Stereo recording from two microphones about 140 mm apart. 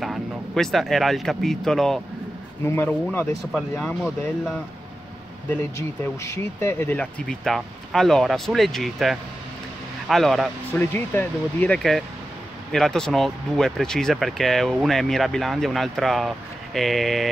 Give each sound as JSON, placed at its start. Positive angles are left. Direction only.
{"t": 0.0, "sound": "speech", "side_deg": 0}
{"t": 2.6, "sound": "speech", "side_deg": 15}
{"t": 5.8, "sound": "speech", "side_deg": 20}
{"t": 10.7, "sound": "speech", "side_deg": 15}